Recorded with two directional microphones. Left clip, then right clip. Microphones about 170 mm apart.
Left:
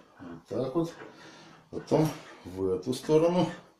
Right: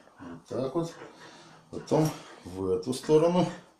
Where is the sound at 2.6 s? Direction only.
15° right (ahead or behind).